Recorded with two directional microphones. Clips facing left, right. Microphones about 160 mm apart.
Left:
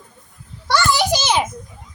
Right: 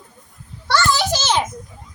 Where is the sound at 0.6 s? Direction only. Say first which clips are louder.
Left 1 dB; 15° left (ahead or behind).